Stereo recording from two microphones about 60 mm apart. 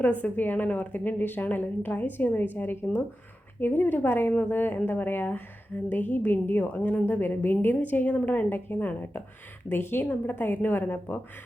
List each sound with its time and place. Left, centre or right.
0.0 s a woman's voice: left